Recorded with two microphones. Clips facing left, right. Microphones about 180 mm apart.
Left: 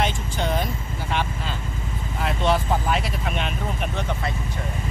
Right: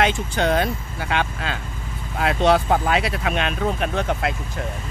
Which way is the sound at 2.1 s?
80° right.